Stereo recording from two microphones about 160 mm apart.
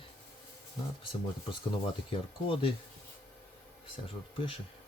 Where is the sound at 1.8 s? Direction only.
30° left (ahead or behind).